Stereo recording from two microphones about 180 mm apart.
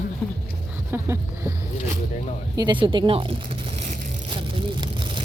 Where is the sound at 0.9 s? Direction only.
15° right (ahead or behind).